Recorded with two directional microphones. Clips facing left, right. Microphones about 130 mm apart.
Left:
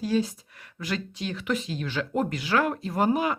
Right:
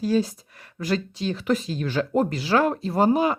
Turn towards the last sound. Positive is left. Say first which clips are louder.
# right 4 dB
turn(degrees=-30)  # may be behind; listen again after turning